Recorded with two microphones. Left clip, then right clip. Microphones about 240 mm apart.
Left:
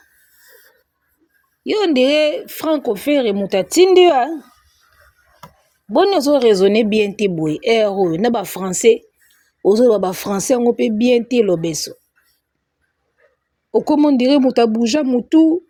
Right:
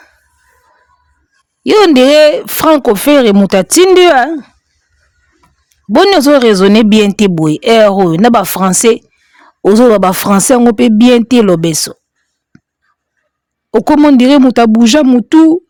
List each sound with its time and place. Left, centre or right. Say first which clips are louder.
1.6 s speech: right 10 dB; right
5.9 s speech: right 8 dB; right
13.7 s speech: right 7 dB; right